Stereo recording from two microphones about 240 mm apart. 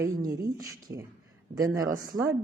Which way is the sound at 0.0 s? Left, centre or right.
Centre.